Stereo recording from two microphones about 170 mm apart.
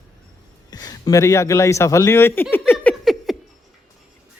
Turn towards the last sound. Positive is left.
turn(degrees=0)  # may be behind; listen again after turning